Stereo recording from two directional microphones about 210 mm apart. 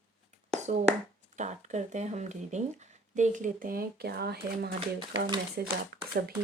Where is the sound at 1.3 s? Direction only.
35° right (ahead or behind).